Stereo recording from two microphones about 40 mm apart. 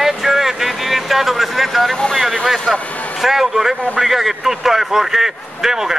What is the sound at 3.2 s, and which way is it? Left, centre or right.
Speech, centre.